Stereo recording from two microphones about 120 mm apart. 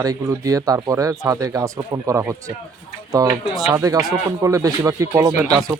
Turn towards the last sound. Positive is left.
turn(degrees=-30)  # may be behind; listen again after turning